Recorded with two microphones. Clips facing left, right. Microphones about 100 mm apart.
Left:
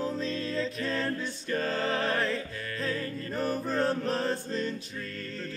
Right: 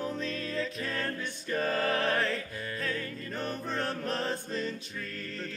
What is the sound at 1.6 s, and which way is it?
Music, 25° left (ahead or behind).